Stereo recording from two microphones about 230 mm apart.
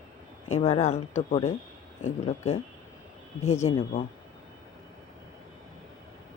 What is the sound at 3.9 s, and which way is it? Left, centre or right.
Speech, left.